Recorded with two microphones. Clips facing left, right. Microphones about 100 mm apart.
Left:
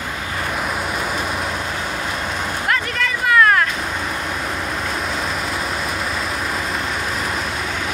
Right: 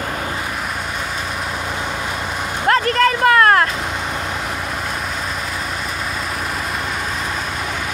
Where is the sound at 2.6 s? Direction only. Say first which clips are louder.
Right 9 dB; 45° right (ahead or behind).